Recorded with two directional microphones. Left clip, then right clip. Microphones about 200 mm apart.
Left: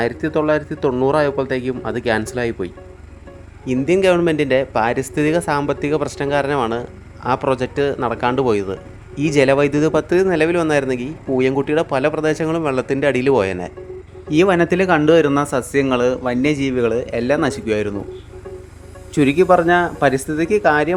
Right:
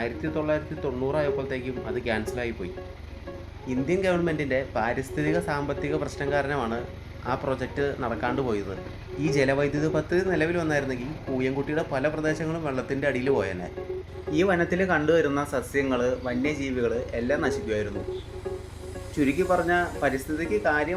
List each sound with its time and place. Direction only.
0.0 s speech: 45° left (ahead or behind)
3.7 s speech: 45° left (ahead or behind)
19.1 s speech: 45° left (ahead or behind)